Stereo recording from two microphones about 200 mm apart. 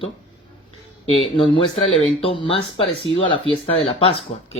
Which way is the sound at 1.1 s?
25° left (ahead or behind).